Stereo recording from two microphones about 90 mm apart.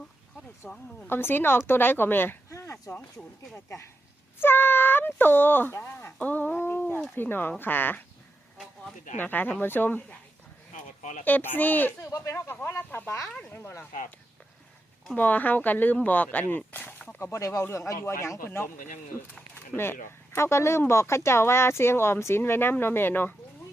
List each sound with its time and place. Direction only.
0.6 s speech: 15° left (ahead or behind)
1.0 s speech: 25° left (ahead or behind)
4.4 s speech: 25° left (ahead or behind)
6.1 s speech: 20° left (ahead or behind)
9.1 s speech: 20° left (ahead or behind)
11.3 s speech: 20° left (ahead or behind)
12.0 s speech: 35° left (ahead or behind)
12.6 s speech: 25° left (ahead or behind)
15.1 s speech: 20° left (ahead or behind)
17.3 s speech: 35° left (ahead or behind)